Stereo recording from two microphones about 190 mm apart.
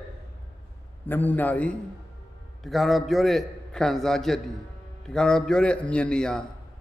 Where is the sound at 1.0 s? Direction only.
10° left (ahead or behind).